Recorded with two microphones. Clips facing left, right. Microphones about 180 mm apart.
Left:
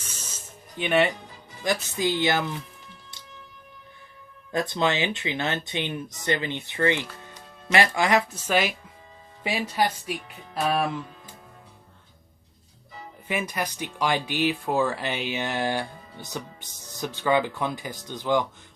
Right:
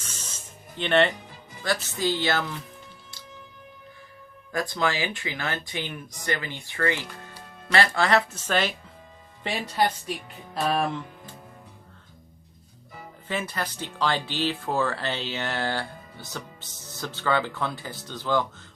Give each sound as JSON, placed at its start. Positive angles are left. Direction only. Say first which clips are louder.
{"t": 0.0, "sound": "spray", "louder": "even", "side_deg": 10}
{"t": 0.8, "sound": "speech", "louder": "even", "side_deg": 10}
{"t": 4.5, "sound": "speech", "louder": "left 2 dB", "side_deg": 25}
{"t": 13.2, "sound": "speech", "louder": "left 2 dB", "side_deg": 15}